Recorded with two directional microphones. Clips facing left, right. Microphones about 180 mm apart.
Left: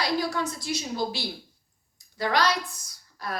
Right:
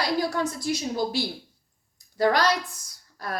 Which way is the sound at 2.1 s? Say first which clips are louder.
Right 3 dB; 45° right (ahead or behind).